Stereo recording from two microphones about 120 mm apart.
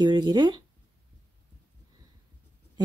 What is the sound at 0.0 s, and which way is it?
Speech, 40° right (ahead or behind).